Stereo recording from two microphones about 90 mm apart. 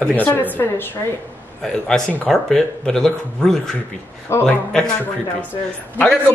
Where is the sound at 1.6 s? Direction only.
5° left (ahead or behind).